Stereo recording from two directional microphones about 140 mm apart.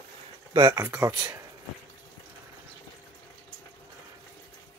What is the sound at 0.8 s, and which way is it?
Speech, 20° right (ahead or behind).